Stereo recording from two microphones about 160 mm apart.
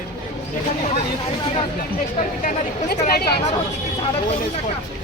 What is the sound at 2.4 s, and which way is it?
Speech, 65° left (ahead or behind).